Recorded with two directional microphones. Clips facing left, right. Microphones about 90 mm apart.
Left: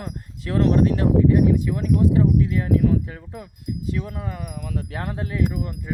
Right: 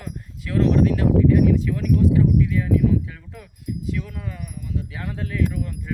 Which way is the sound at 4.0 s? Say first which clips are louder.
Left 2 dB; 35° left (ahead or behind).